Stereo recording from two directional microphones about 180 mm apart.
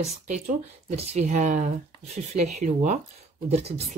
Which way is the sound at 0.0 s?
40° right (ahead or behind).